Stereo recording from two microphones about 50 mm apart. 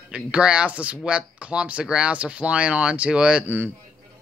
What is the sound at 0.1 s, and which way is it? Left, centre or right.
Speech, right.